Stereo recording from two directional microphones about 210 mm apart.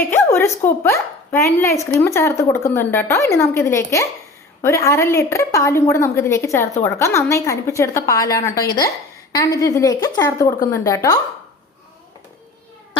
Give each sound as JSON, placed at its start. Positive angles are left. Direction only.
{"t": 0.1, "sound": "speech", "side_deg": 10}